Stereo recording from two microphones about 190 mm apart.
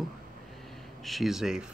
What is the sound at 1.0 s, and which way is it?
Speech, centre (ahead or behind).